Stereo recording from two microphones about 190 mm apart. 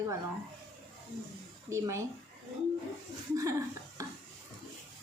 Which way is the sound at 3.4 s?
15° right (ahead or behind).